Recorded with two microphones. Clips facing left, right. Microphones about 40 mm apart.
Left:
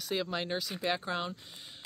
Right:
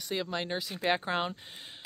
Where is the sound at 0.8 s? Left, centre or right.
Right.